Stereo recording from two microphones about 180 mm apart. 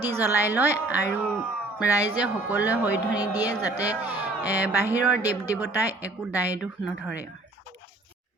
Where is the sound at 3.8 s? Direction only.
10° right (ahead or behind).